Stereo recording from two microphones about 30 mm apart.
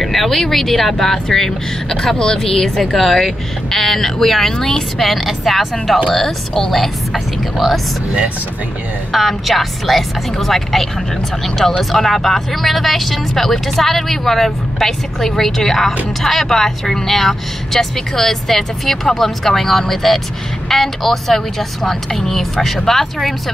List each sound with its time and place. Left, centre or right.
0.0 s speech: centre
4.9 s a woman's voice: centre
9.1 s a woman's voice: centre